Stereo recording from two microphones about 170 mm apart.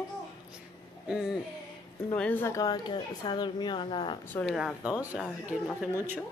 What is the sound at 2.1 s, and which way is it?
A woman's voice, 10° left (ahead or behind).